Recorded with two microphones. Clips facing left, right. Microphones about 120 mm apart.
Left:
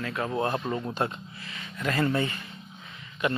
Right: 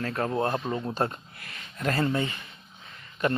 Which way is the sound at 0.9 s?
40° right (ahead or behind).